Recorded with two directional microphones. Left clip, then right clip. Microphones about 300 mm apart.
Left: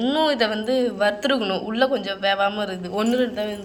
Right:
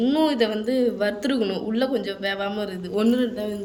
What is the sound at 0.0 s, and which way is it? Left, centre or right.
Speech, centre.